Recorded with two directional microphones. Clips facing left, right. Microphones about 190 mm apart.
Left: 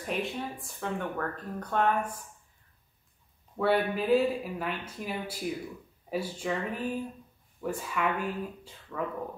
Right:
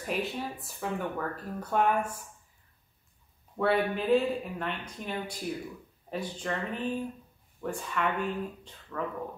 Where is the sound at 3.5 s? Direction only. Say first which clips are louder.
Even; centre (ahead or behind).